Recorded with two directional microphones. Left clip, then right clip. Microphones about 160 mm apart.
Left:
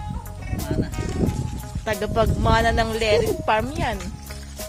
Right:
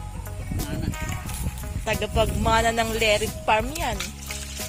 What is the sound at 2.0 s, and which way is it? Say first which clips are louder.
Speech: left 3 dB; 35° left (ahead or behind).